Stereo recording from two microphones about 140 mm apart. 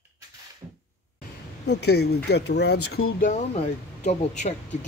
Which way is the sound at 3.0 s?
75° left (ahead or behind).